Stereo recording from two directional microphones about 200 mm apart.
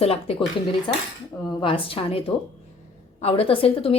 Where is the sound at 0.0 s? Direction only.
30° left (ahead or behind).